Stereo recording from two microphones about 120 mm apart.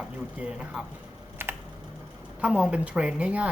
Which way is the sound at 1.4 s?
20° right (ahead or behind).